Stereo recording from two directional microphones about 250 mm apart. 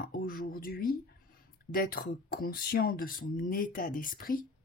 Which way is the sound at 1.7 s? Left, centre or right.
Left.